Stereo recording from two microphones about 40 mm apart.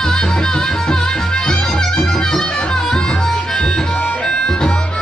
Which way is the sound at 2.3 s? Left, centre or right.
Centre.